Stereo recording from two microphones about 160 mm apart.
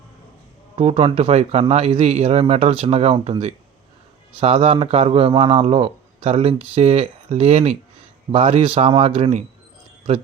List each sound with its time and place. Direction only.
0.8 s a man's voice: 40° right (ahead or behind)